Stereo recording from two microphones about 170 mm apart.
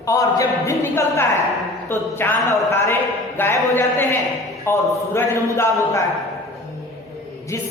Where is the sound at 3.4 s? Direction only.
15° left (ahead or behind).